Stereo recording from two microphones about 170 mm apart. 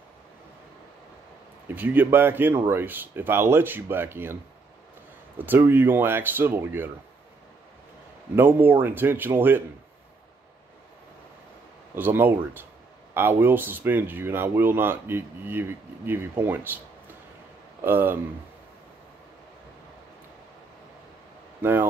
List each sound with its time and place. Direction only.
1.7 s speech: 10° right (ahead or behind)
5.4 s speech: 10° right (ahead or behind)
8.4 s speech: 10° right (ahead or behind)
11.9 s speech: 10° right (ahead or behind)
17.8 s speech: 10° right (ahead or behind)
21.5 s speech: 10° right (ahead or behind)